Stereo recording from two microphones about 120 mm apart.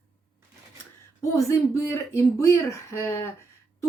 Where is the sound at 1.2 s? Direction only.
25° left (ahead or behind).